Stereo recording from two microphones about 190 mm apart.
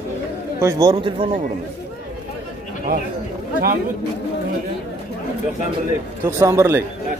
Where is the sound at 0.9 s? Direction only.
30° right (ahead or behind).